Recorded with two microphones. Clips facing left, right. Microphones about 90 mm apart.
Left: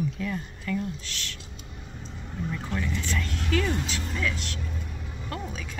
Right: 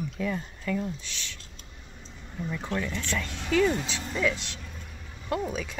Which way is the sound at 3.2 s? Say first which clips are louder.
Right 5 dB; 10° right (ahead or behind).